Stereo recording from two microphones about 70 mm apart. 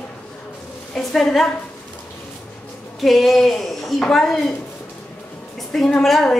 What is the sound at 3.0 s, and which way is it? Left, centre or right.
A woman's voice, centre.